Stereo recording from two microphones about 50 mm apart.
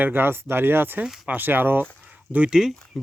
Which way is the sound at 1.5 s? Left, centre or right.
Right.